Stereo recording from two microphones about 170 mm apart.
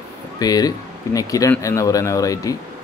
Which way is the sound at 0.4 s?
20° left (ahead or behind).